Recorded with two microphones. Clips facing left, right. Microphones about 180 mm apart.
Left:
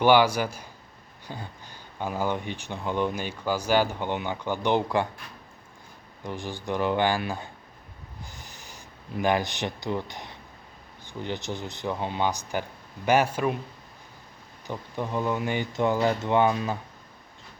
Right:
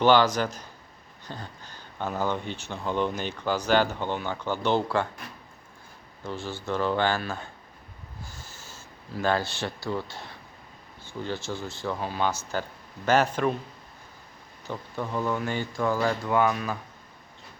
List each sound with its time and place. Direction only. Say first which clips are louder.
0.0 s speech: left 1 dB; 10° left (ahead or behind)
6.2 s speech: even; 15° left (ahead or behind)
14.7 s speech: left 1 dB; 15° left (ahead or behind)